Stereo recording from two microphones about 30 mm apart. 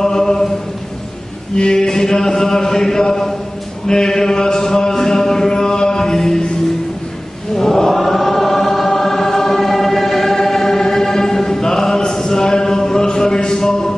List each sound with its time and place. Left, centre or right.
0.0 s chant: centre
1.8 s chant: centre
3.8 s mantra: centre
7.5 s wail: centre